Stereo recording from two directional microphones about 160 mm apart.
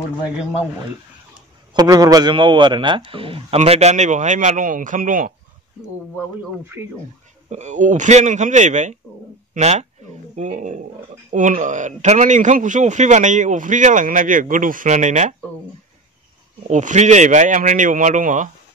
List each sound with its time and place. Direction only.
1.7 s a man's voice: 25° right (ahead or behind); by 5.3 s 55° right (ahead or behind)
7.4 s a man's voice: 45° right (ahead or behind)
16.6 s a man's voice: 50° right (ahead or behind)